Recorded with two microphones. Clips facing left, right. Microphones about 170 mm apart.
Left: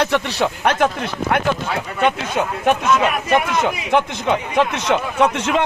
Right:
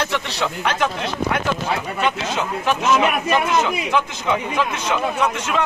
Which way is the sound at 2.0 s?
55° left (ahead or behind).